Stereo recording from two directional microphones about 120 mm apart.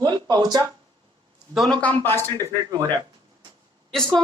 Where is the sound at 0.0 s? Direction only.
35° right (ahead or behind).